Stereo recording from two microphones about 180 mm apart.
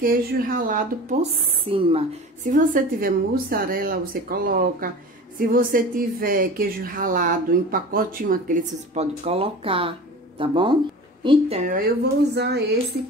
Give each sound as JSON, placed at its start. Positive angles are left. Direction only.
{"t": 0.0, "sound": "speech", "side_deg": -55}
{"t": 1.7, "sound": "speech", "side_deg": -30}
{"t": 2.4, "sound": "speech", "side_deg": -50}
{"t": 8.9, "sound": "speech", "side_deg": -35}
{"t": 11.7, "sound": "speech", "side_deg": -65}